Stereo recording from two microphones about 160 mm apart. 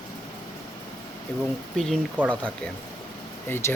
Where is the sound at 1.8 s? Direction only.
5° left (ahead or behind).